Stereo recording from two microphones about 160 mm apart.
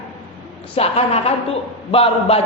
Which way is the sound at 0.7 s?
40° left (ahead or behind).